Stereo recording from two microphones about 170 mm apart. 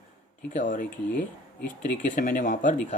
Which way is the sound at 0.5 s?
50° left (ahead or behind).